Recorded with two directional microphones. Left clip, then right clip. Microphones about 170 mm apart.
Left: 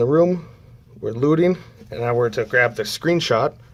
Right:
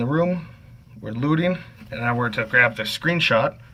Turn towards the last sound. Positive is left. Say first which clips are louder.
# left 1 dB
turn(degrees=45)  # may be behind; listen again after turning